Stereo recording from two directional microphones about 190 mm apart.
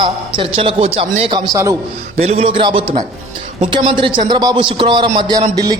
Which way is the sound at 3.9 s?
25° right (ahead or behind).